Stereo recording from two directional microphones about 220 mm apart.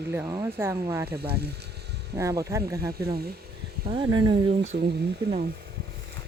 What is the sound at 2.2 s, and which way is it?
Speech, 15° right (ahead or behind).